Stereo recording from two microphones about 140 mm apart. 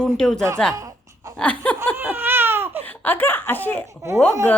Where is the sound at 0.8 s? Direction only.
25° right (ahead or behind).